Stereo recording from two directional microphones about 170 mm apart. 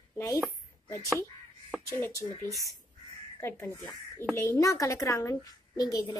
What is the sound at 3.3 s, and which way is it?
Speech, 15° left (ahead or behind).